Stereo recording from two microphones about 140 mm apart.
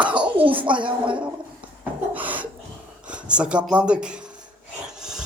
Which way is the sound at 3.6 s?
5° right (ahead or behind).